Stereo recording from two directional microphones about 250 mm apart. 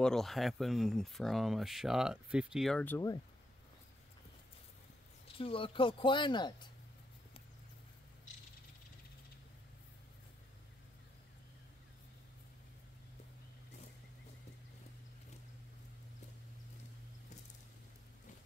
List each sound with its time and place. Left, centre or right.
0.0 s speech: centre
5.4 s speech: left